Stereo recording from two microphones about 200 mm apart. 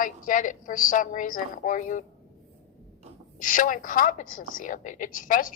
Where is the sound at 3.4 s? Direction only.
40° left (ahead or behind).